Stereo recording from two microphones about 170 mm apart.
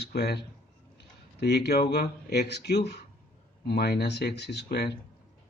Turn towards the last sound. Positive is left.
turn(degrees=75)  # may be behind; listen again after turning